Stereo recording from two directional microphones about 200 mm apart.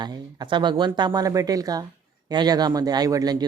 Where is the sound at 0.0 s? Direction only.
20° right (ahead or behind).